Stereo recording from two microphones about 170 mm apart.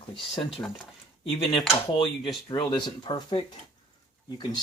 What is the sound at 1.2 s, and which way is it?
Speech, 30° left (ahead or behind).